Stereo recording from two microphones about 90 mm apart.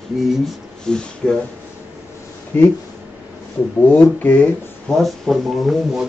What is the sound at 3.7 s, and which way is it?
Speech, 20° left (ahead or behind).